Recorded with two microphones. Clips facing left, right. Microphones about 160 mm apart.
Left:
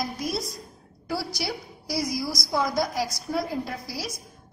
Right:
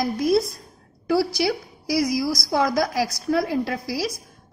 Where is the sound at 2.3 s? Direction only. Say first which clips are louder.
Right 4 dB; 75° right (ahead or behind).